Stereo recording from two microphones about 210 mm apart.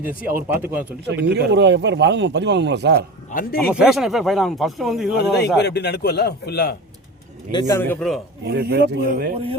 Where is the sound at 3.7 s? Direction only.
Centre (ahead or behind).